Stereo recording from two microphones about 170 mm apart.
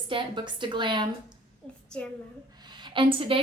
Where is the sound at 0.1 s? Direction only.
30° right (ahead or behind).